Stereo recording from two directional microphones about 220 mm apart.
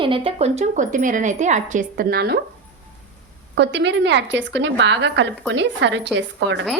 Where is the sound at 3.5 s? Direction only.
50° right (ahead or behind).